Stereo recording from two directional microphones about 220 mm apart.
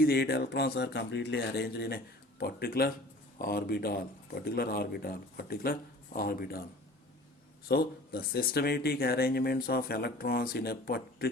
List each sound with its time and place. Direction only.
0.0 s speech: 45° left (ahead or behind)
7.7 s speech: 45° left (ahead or behind)